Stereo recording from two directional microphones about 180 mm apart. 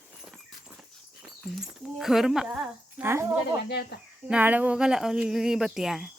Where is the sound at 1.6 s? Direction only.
Centre (ahead or behind).